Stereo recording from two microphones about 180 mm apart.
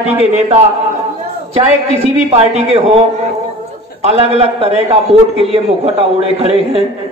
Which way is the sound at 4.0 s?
35° right (ahead or behind).